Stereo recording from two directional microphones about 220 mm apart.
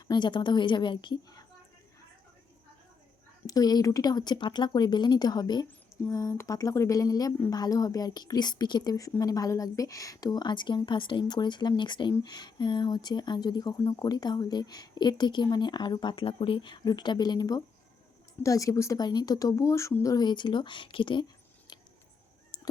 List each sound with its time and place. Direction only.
0.1 s speech: 20° left (ahead or behind)
3.4 s speech: 15° left (ahead or behind)
22.5 s a sound: 20° left (ahead or behind)